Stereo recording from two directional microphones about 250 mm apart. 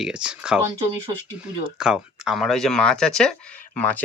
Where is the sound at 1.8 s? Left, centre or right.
Centre.